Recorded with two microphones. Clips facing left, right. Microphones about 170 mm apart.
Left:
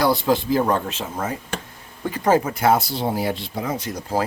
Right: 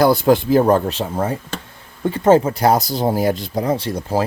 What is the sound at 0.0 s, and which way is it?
Speech, 55° right (ahead or behind).